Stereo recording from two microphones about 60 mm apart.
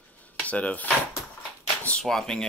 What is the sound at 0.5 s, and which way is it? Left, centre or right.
Speech, left.